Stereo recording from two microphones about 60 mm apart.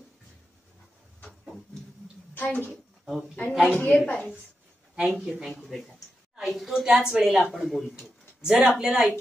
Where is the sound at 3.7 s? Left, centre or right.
Centre.